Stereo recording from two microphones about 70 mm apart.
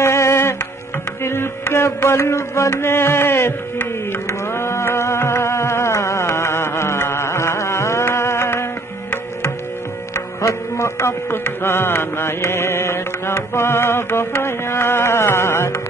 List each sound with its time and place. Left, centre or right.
0.0 s music: left
10.1 s music: left